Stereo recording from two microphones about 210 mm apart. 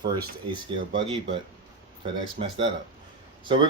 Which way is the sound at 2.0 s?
25° right (ahead or behind).